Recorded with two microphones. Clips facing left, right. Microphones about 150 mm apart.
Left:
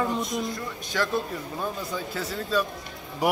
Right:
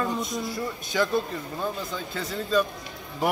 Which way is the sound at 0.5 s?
5° right (ahead or behind).